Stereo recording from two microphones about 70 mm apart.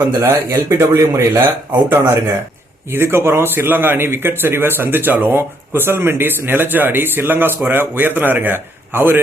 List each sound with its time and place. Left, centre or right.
0.0 s a man's voice: right
1.9 s a man's voice: right